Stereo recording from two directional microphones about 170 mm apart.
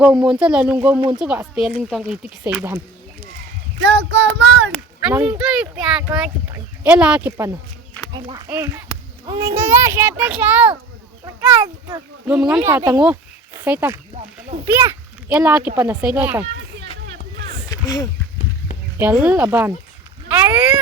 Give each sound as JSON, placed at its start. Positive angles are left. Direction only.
{"t": 0.0, "sound": "speech", "side_deg": -5}
{"t": 3.8, "sound": "child singing", "side_deg": -90}
{"t": 4.9, "sound": "speech", "side_deg": -10}
{"t": 8.1, "sound": "a child's voice", "side_deg": -25}
{"t": 8.4, "sound": "speech", "side_deg": -15}
{"t": 9.2, "sound": "a child's voice", "side_deg": -25}
{"t": 9.6, "sound": "speech", "side_deg": -15}
{"t": 11.3, "sound": "a child's voice", "side_deg": -20}
{"t": 12.2, "sound": "a child's voice", "side_deg": -10}
{"t": 17.7, "sound": "a sound", "side_deg": 20}
{"t": 18.9, "sound": "speech", "side_deg": -10}